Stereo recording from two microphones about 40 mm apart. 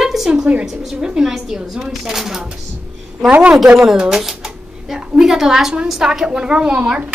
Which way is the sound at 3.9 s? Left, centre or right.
Centre.